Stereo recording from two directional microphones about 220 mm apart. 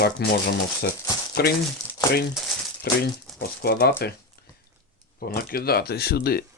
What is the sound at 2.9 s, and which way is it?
Speech, 45° left (ahead or behind).